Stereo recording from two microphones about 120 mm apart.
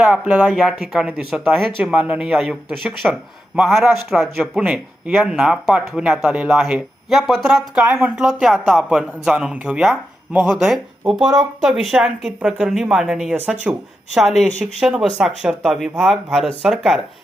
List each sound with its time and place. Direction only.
0.0 s a man's voice: 10° right (ahead or behind)
11.2 s speech: 35° right (ahead or behind)
11.6 s speech: 5° right (ahead or behind)